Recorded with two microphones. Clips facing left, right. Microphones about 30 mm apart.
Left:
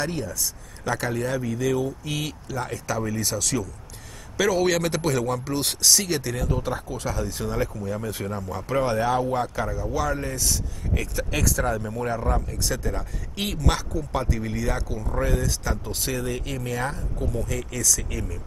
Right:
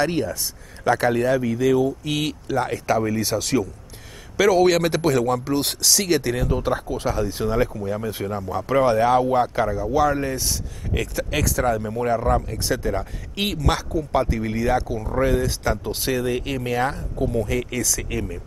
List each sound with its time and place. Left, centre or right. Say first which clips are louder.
0.0 s speech: right 6 dB; right
0.8 s speech: right 7 dB; right
2.1 s speech: right 7 dB; right
4.4 s a man's voice: right 5 dB; centre
6.0 s a man's voice: right 5 dB; right
13.9 s speech: right 5 dB; right